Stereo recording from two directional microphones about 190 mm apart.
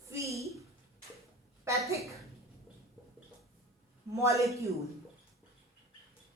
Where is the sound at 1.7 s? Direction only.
15° right (ahead or behind).